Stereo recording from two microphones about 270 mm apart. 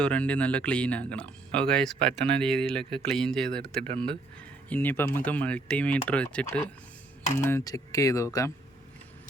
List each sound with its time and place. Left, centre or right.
0.0 s speech: centre